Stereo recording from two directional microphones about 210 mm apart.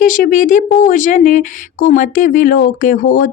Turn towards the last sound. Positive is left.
turn(degrees=40)  # may be behind; listen again after turning